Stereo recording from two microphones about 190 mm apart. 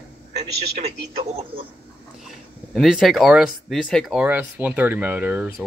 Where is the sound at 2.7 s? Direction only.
Centre (ahead or behind).